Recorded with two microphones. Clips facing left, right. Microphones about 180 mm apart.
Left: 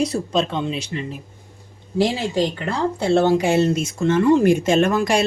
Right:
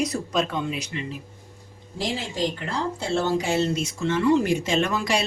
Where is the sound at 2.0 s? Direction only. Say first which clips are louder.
Left 7 dB; 65° left (ahead or behind).